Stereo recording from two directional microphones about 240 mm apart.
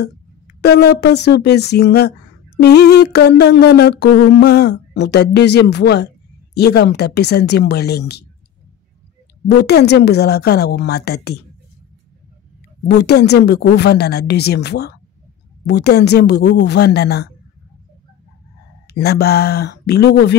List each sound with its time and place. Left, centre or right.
0.6 s speech: left
9.6 s speech: left
12.8 s speech: left
18.9 s speech: left